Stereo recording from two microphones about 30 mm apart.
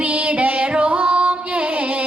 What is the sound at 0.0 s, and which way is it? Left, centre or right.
Music, right.